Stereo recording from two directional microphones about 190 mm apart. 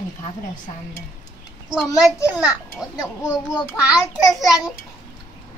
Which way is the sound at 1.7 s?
Centre (ahead or behind).